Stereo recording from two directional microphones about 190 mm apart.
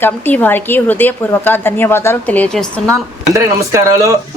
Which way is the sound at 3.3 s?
15° right (ahead or behind).